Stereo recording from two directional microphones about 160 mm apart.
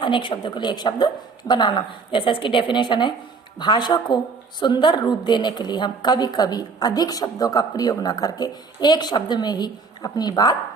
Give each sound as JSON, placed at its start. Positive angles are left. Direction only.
{"t": 0.0, "sound": "a woman's voice", "side_deg": 30}